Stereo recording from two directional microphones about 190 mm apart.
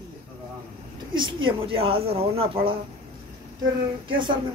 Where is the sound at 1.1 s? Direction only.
25° right (ahead or behind).